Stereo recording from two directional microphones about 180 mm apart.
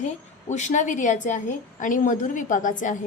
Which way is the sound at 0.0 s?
40° left (ahead or behind).